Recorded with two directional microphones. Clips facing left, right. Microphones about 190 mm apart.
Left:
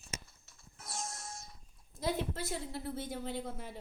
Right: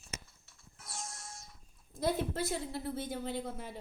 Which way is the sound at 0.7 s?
45° left (ahead or behind).